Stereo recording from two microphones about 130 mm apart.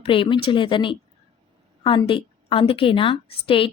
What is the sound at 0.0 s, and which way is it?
A woman's voice, 40° left (ahead or behind).